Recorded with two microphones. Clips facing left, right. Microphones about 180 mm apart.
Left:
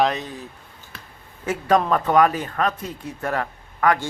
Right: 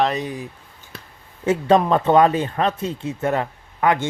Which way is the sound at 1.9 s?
25° right (ahead or behind).